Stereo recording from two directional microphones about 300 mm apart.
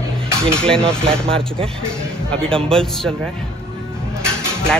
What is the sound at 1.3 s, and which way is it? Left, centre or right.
Speech, centre.